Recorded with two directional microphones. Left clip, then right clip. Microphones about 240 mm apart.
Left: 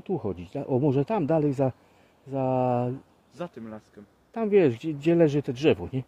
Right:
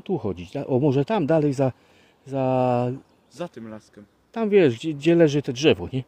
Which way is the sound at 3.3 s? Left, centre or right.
Right.